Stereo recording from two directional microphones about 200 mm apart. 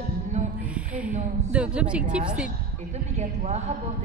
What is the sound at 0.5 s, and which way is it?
Speech, 5° right (ahead or behind).